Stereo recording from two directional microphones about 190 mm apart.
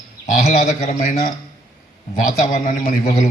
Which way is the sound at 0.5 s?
45° left (ahead or behind).